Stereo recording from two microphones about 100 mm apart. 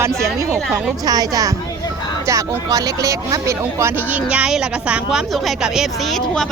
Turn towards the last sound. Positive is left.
turn(degrees=-5)  # may be behind; listen again after turning